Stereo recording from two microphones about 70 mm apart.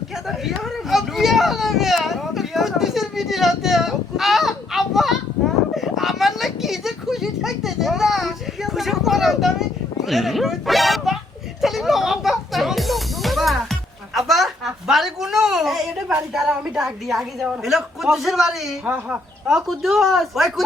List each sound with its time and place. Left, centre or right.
0.3 s a sound: centre
11.6 s music: centre
16.3 s a woman's voice: centre
18.9 s speech: right
19.5 s a man's voice: centre